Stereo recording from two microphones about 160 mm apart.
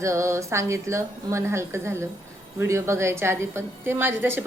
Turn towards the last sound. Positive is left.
turn(degrees=-15)  # may be behind; listen again after turning